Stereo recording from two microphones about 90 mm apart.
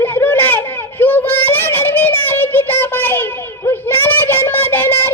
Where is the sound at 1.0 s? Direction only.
20° left (ahead or behind).